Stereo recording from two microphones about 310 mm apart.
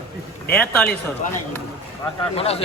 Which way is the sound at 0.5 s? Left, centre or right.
Centre.